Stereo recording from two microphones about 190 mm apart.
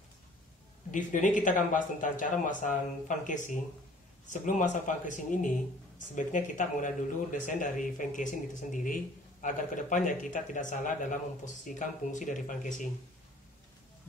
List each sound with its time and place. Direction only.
0.9 s speech: 40° left (ahead or behind)